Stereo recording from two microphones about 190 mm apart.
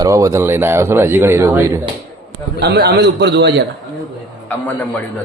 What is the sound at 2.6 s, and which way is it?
Speech, 60° right (ahead or behind).